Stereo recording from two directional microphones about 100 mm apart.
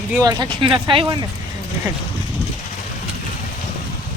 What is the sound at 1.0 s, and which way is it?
Speech, 45° right (ahead or behind).